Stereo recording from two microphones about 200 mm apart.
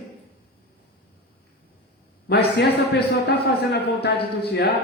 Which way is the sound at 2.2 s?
55° left (ahead or behind).